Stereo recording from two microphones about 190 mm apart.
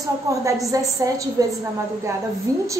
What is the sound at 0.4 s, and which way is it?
Speech, 15° right (ahead or behind).